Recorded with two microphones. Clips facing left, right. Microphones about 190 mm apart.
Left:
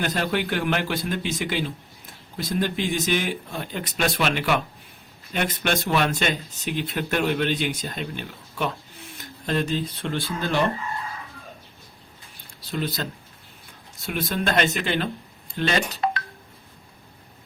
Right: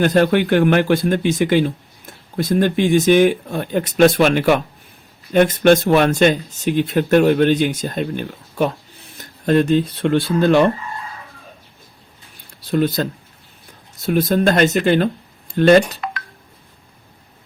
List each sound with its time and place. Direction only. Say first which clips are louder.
0.0 s speech: right 11 dB; 55° right (ahead or behind)
12.7 s speech: right 10 dB; 50° right (ahead or behind)
16.0 s telephone dialing: left 3 dB; 30° left (ahead or behind)